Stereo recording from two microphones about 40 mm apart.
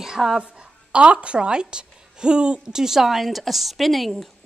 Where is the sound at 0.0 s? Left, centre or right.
Centre.